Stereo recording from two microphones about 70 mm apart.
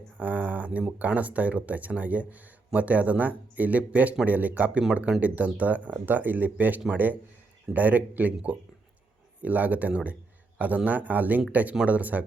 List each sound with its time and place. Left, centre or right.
0.2 s speech: right